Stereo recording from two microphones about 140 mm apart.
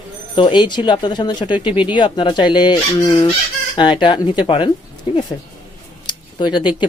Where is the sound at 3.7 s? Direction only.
35° left (ahead or behind).